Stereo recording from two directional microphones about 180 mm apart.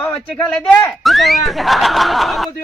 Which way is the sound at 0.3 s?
5° left (ahead or behind).